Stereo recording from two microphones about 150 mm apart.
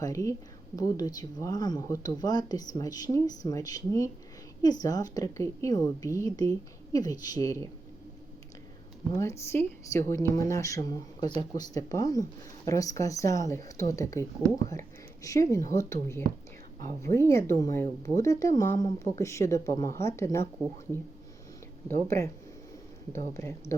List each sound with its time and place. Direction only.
0.0 s speech: 20° left (ahead or behind)
9.1 s speech: 20° left (ahead or behind)
21.8 s speech: 15° left (ahead or behind)